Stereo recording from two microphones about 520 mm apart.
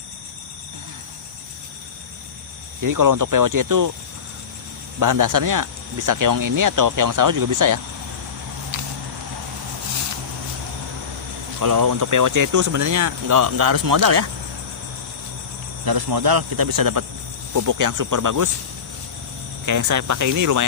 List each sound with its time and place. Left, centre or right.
2.8 s speech: right
4.9 s speech: right
11.6 s speech: right
15.9 s speech: right
19.6 s speech: right